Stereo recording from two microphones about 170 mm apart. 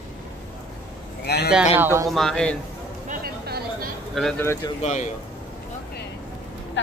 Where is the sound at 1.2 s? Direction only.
70° left (ahead or behind).